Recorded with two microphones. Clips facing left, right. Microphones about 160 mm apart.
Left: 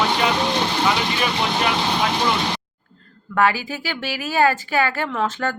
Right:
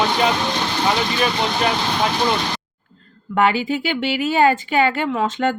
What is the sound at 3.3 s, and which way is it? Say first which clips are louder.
Speech: right 2 dB; 20° right (ahead or behind).